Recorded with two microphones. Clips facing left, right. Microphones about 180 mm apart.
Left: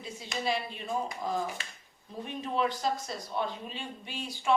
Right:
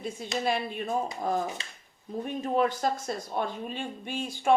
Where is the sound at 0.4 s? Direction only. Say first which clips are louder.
Right 3 dB; 55° right (ahead or behind).